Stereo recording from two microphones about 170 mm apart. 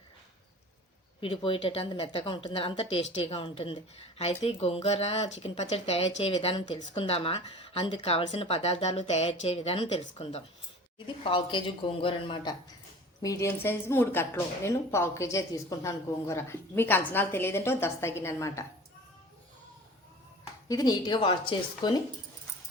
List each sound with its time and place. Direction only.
1.2 s speech: 30° left (ahead or behind)
13.2 s speech: 15° left (ahead or behind)
20.7 s speech: 25° left (ahead or behind)